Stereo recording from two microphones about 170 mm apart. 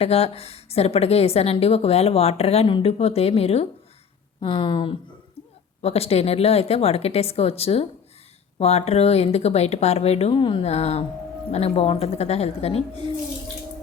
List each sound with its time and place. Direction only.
0.0 s a woman's voice: 35° left (ahead or behind)